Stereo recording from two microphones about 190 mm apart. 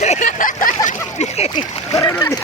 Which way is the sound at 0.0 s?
40° left (ahead or behind).